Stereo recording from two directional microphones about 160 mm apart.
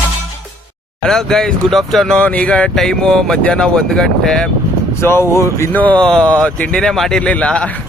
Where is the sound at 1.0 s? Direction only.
Centre (ahead or behind).